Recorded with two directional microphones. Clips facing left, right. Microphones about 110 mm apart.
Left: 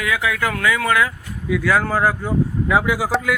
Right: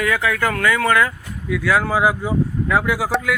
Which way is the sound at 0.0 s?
Centre (ahead or behind).